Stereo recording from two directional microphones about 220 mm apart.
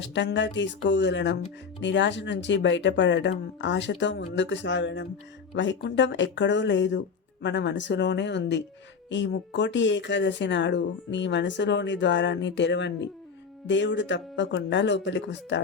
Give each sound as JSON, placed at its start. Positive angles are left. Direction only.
{"t": 0.0, "sound": "speech", "side_deg": 55}